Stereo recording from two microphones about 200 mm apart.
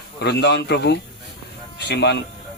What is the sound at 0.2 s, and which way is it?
A man's voice, 55° left (ahead or behind).